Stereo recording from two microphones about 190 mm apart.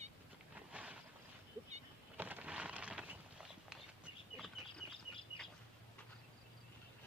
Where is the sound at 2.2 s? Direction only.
10° right (ahead or behind).